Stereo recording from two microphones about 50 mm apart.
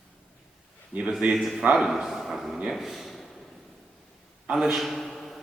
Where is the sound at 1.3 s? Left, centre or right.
Centre.